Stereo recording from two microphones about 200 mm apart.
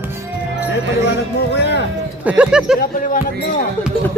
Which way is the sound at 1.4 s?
55° left (ahead or behind).